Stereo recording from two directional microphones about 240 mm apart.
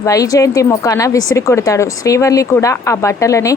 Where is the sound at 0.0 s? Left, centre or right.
Centre.